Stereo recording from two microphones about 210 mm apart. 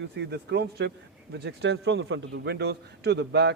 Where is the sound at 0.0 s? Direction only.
50° right (ahead or behind).